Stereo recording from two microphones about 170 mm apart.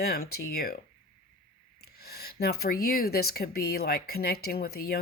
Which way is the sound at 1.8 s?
65° left (ahead or behind).